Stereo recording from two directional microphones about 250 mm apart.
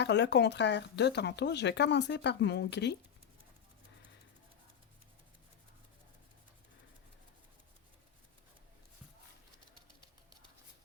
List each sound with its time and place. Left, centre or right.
0.0 s speech: left